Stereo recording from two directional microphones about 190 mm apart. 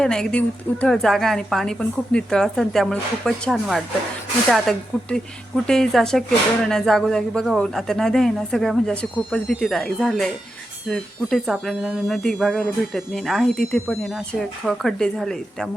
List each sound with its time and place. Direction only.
0.0 s speech: 5° left (ahead or behind)